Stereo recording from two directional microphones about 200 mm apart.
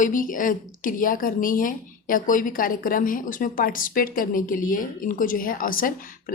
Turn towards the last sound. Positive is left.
turn(degrees=45)  # may be behind; listen again after turning